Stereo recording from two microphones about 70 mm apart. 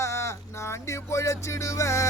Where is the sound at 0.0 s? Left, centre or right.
Left.